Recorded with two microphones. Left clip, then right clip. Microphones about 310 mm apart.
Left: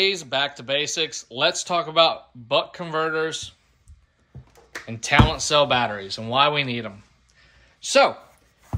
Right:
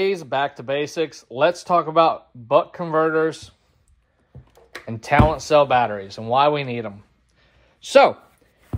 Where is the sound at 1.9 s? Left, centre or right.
Centre.